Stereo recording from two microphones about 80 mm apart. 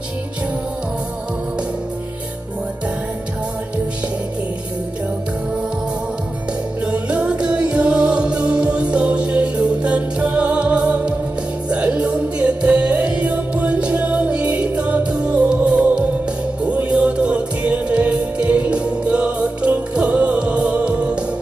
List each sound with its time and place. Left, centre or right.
6.8 s music: centre